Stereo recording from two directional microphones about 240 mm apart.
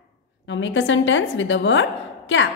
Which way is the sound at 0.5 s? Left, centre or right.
Left.